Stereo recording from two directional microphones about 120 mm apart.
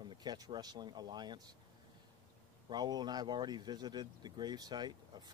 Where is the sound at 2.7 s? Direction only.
35° right (ahead or behind).